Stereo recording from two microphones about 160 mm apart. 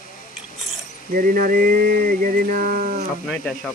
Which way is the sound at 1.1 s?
60° right (ahead or behind).